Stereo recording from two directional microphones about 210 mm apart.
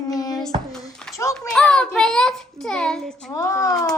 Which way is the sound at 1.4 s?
5° left (ahead or behind).